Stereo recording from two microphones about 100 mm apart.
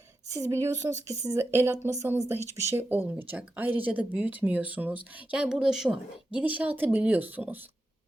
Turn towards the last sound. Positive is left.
turn(degrees=-15)  # may be behind; listen again after turning